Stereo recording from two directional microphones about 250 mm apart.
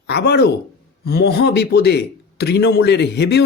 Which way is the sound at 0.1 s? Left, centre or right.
Left.